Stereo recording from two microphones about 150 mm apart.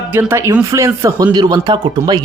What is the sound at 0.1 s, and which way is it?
Speech, 15° right (ahead or behind).